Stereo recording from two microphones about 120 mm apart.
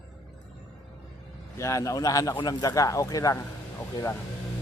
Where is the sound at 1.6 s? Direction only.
25° left (ahead or behind).